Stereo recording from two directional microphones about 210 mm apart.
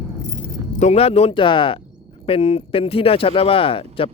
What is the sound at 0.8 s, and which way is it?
Speech, 30° left (ahead or behind).